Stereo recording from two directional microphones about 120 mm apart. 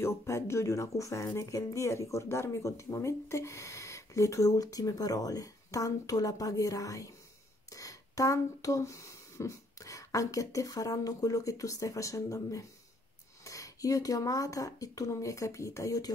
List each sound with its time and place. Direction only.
0.0 s speech: 20° left (ahead or behind)